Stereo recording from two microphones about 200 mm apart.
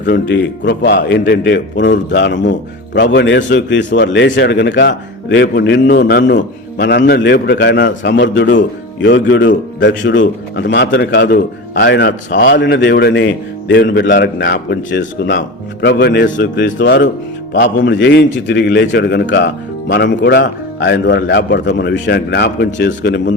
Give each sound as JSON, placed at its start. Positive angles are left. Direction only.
{"t": 0.0, "sound": "a man's voice", "side_deg": 65}
{"t": 12.4, "sound": "a man's voice", "side_deg": 50}